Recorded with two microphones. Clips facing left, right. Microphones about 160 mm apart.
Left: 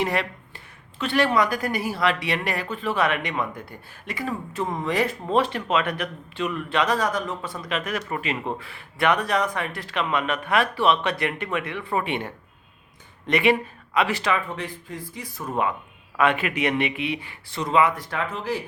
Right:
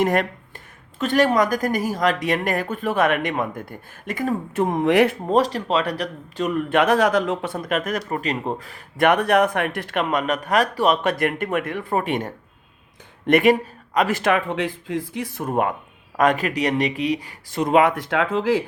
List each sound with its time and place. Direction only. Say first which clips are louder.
0.0 s speech: right 5 dB; 45° right (ahead or behind)
5.2 s speech: right 3 dB; 40° right (ahead or behind); by 7.5 s 90° right
7.5 s speech: right 4 dB; 50° right (ahead or behind); by 15.4 s 85° right
15.4 s speech: right 3 dB; 50° right (ahead or behind)
16.1 s speech: right 3 dB; 40° right (ahead or behind); by 18.6 s 90° right